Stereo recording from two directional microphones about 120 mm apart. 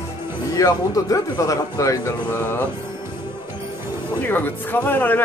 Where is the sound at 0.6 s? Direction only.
30° left (ahead or behind).